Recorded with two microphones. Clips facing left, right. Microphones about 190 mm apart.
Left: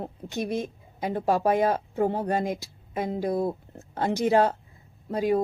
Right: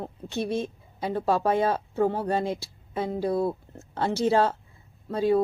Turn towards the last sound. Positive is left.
turn(degrees=15)  # may be behind; listen again after turning